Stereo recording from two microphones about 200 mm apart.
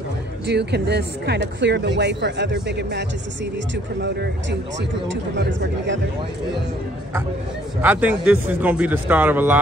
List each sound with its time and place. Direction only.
0.5 s speech: 55° right (ahead or behind)
7.8 s speech: 5° right (ahead or behind)